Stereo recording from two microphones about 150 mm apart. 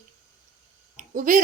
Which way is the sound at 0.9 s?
60° right (ahead or behind).